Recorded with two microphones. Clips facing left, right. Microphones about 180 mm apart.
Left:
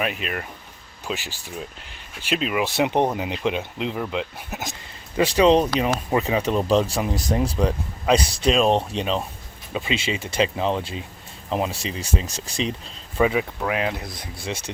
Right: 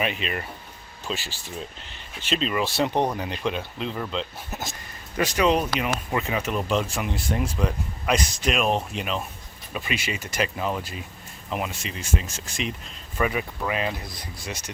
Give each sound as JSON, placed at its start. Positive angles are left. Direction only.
{"t": 0.0, "sound": "speech", "side_deg": 0}
{"t": 1.0, "sound": "speech", "side_deg": 15}
{"t": 4.6, "sound": "a sound", "side_deg": 20}
{"t": 5.2, "sound": "speech", "side_deg": 30}
{"t": 13.2, "sound": "speech", "side_deg": 20}
{"t": 14.0, "sound": "speech", "side_deg": 0}